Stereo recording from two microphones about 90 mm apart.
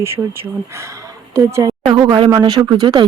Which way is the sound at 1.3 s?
40° right (ahead or behind).